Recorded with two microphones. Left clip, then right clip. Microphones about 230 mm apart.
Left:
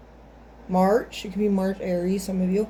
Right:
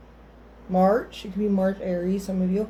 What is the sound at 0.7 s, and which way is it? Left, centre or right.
Speech, left.